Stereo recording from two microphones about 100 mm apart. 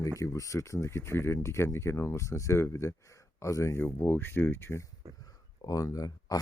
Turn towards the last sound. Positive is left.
turn(degrees=35)  # may be behind; listen again after turning